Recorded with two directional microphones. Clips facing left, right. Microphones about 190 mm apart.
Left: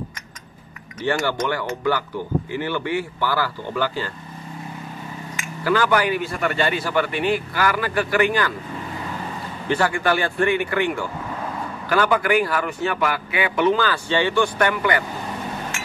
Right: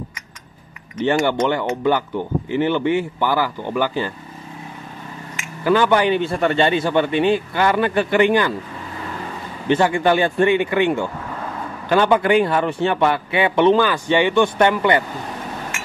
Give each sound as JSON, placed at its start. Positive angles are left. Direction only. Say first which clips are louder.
{"t": 0.9, "sound": "a man's voice", "louder": "right 5 dB", "side_deg": -20}
{"t": 5.6, "sound": "a man's voice", "louder": "right 4 dB", "side_deg": -20}
{"t": 9.7, "sound": "a man's voice", "louder": "right 4 dB", "side_deg": -20}